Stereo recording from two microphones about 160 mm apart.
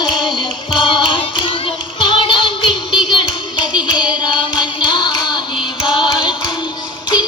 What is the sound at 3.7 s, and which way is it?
Music, 5° right (ahead or behind).